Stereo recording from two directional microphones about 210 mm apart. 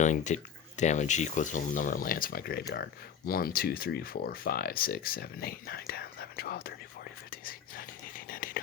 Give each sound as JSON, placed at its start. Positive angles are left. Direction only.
{"t": 0.0, "sound": "speech", "side_deg": 35}
{"t": 7.3, "sound": "whispering", "side_deg": 40}